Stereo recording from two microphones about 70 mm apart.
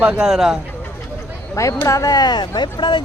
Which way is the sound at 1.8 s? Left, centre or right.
Left.